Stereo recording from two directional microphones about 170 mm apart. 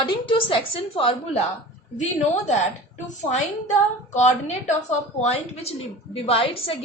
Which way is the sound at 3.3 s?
40° left (ahead or behind).